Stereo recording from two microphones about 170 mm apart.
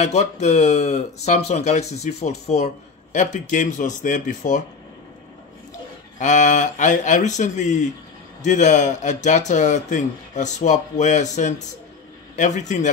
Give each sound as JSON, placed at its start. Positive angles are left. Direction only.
{"t": 0.0, "sound": "speech", "side_deg": 40}
{"t": 6.1, "sound": "a man's voice", "side_deg": 45}